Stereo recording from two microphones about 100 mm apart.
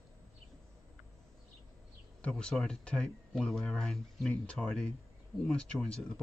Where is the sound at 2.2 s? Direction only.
10° left (ahead or behind).